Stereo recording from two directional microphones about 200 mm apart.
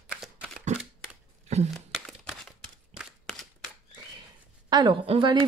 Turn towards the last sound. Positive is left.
turn(degrees=-25)  # may be behind; listen again after turning